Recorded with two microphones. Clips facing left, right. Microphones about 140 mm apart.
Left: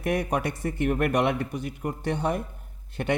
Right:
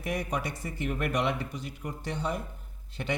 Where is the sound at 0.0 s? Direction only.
55° left (ahead or behind).